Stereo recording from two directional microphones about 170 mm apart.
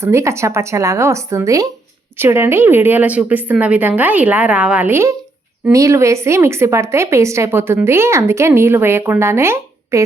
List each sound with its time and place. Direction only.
0.0 s speech: 15° right (ahead or behind)